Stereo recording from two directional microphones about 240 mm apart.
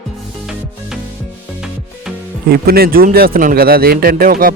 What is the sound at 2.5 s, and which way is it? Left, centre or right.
A man's voice, right.